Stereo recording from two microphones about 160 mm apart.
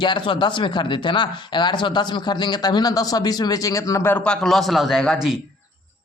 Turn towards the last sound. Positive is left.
turn(degrees=0)  # may be behind; listen again after turning